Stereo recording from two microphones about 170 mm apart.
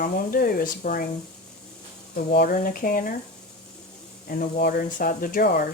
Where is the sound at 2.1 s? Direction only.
65° left (ahead or behind).